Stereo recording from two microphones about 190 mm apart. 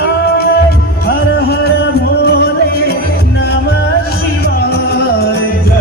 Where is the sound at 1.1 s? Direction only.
55° left (ahead or behind).